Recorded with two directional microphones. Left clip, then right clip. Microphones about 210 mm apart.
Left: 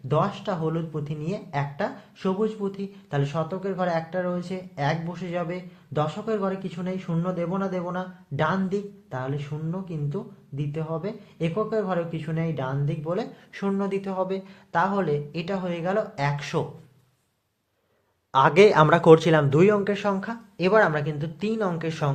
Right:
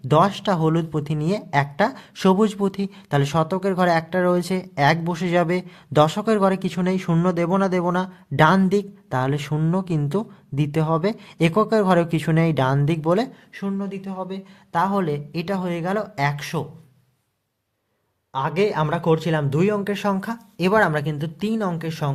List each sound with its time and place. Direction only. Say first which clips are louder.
0.1 s speech: right 7 dB; 45° right (ahead or behind)
13.5 s speech: left 3 dB; 20° right (ahead or behind)
14.7 s speech: right 2 dB; 35° right (ahead or behind)
18.3 s speech: left 5 dB; centre (ahead or behind); by 22.1 s 30° right (ahead or behind)